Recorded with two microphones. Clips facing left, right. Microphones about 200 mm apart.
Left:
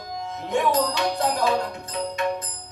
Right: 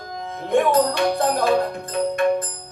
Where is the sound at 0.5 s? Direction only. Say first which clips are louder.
Right 5 dB; 55° right (ahead or behind).